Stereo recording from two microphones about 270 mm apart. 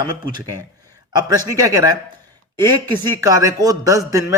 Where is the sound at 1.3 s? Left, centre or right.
Centre.